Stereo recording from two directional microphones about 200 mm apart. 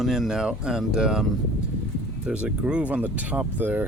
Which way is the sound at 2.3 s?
5° right (ahead or behind).